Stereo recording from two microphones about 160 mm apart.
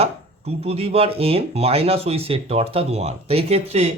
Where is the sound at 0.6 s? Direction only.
40° right (ahead or behind).